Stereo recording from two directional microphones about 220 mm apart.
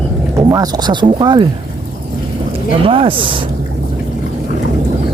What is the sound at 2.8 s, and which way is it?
Speech, 25° right (ahead or behind).